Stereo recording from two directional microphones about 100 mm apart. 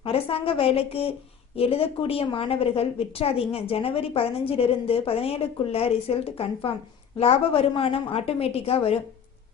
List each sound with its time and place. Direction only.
0.0 s a woman's voice: 70° left (ahead or behind)